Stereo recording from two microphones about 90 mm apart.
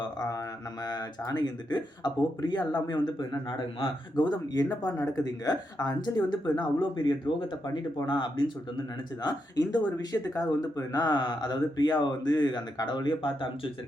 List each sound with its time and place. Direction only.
0.0 s a sound: 45° left (ahead or behind)
0.9 s speech: 50° left (ahead or behind)
9.2 s speech: 50° left (ahead or behind)